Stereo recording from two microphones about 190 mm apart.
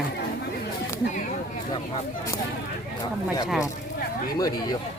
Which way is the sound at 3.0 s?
20° left (ahead or behind).